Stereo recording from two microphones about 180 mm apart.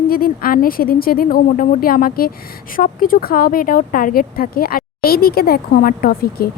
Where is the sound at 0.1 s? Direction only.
55° left (ahead or behind).